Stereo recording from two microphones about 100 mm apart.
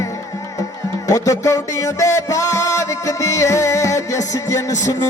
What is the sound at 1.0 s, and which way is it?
Music, 35° left (ahead or behind).